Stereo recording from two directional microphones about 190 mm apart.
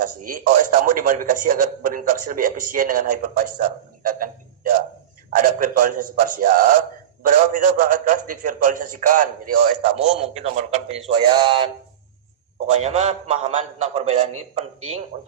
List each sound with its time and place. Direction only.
0.0 s radio: 45° right (ahead or behind)
0.6 s a man's voice: 45° right (ahead or behind)